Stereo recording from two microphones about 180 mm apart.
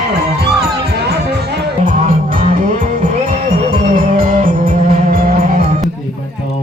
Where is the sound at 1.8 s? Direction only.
45° right (ahead or behind).